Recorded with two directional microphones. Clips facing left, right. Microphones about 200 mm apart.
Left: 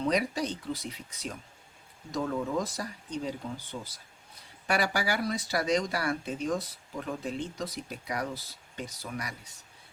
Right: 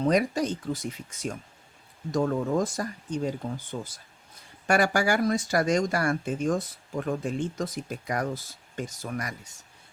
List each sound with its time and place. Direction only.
0.0 s speech: 45° right (ahead or behind)